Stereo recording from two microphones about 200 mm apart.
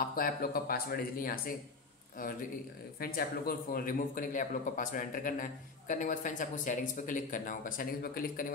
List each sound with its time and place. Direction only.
0.0 s a man's voice: 45° left (ahead or behind)